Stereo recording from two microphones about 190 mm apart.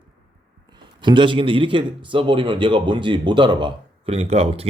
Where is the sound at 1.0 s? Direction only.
25° right (ahead or behind).